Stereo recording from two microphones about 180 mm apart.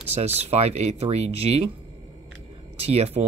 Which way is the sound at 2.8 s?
35° right (ahead or behind).